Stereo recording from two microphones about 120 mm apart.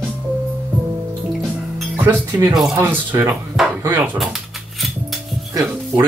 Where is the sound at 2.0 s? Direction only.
15° right (ahead or behind).